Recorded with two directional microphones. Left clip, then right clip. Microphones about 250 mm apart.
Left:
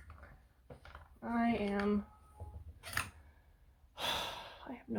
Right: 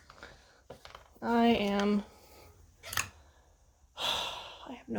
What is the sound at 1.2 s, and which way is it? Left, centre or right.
Speech, right.